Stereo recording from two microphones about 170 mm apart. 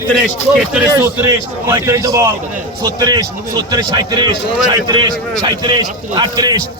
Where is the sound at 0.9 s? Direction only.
15° right (ahead or behind).